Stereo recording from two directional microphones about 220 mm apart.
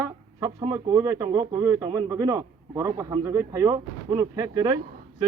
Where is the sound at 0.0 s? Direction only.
15° right (ahead or behind).